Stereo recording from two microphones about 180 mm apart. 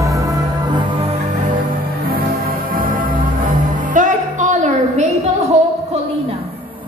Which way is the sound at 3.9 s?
45° right (ahead or behind).